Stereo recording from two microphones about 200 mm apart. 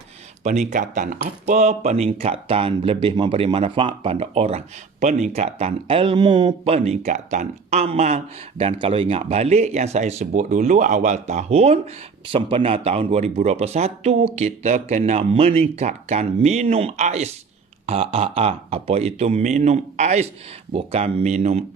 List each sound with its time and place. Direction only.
0.6 s speech: 40° right (ahead or behind); by 6.7 s 20° right (ahead or behind)
6.7 s speech: 35° right (ahead or behind)